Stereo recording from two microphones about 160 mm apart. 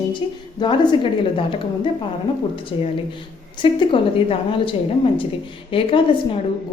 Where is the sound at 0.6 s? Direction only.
30° left (ahead or behind).